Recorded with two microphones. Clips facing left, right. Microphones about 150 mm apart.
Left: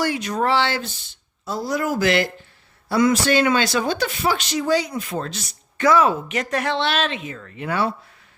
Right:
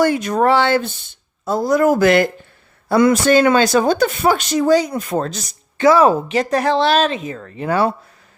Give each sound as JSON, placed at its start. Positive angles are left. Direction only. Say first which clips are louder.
{"t": 0.0, "sound": "speech", "louder": "right 7 dB", "side_deg": -50}
{"t": 5.7, "sound": "speech", "louder": "right 5 dB", "side_deg": -30}